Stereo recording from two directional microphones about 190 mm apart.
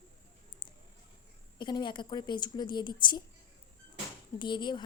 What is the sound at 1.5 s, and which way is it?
A woman's voice, 25° left (ahead or behind).